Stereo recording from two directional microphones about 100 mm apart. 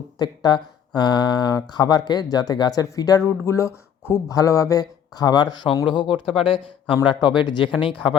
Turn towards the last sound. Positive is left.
turn(degrees=55)  # may be behind; listen again after turning